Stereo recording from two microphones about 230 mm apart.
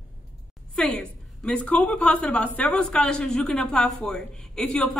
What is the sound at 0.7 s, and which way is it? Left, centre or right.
A woman's voice, centre.